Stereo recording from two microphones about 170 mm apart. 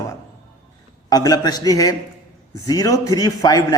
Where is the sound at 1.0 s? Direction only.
20° left (ahead or behind).